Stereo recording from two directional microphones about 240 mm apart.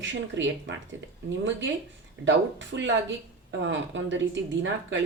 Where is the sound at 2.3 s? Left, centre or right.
Right.